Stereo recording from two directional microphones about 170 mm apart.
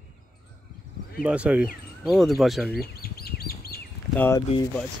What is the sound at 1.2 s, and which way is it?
Speech, 5° right (ahead or behind).